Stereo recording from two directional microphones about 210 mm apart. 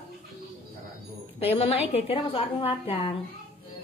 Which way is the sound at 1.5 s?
30° left (ahead or behind).